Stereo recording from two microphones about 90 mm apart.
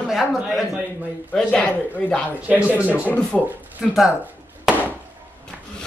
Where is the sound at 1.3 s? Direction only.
10° left (ahead or behind).